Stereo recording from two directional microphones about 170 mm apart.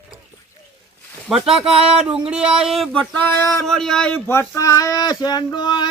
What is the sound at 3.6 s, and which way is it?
Speech, 5° left (ahead or behind).